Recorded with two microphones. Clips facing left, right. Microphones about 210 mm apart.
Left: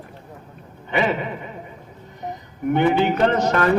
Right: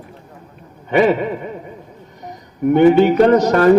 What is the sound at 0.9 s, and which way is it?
Speech, 40° right (ahead or behind).